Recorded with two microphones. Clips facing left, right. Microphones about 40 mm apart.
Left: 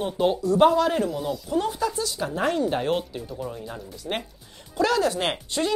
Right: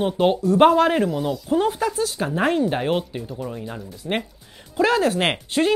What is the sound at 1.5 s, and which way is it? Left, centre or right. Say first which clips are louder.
Speech: right 5 dB; right.